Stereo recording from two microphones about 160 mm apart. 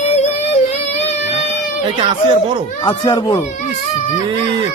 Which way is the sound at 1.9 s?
30° right (ahead or behind).